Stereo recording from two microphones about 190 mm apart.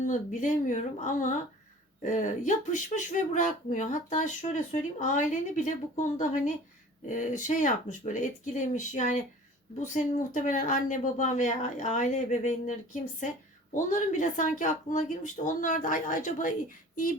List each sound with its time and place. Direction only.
0.0 s speech: 40° left (ahead or behind)